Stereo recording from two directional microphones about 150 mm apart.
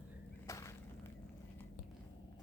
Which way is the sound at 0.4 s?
20° left (ahead or behind).